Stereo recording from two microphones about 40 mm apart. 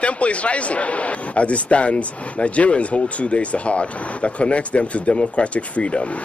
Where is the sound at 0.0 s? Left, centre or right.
Left.